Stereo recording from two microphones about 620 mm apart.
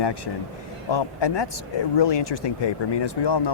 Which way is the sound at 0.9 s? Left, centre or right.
Left.